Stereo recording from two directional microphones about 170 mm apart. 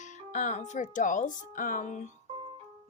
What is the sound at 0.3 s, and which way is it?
A woman's voice, 45° left (ahead or behind).